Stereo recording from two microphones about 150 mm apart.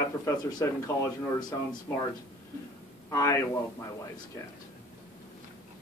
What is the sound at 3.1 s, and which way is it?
Speech, 20° left (ahead or behind).